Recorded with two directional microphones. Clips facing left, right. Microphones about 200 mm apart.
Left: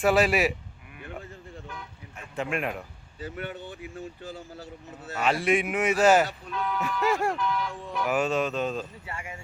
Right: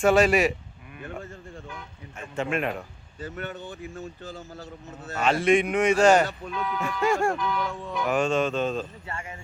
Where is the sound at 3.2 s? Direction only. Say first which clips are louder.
Right 1 dB; 45° right (ahead or behind).